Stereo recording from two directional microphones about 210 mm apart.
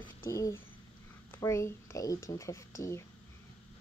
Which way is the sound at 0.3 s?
15° left (ahead or behind).